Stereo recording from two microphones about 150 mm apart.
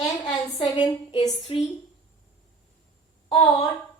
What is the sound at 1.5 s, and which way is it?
Speech, 40° left (ahead or behind).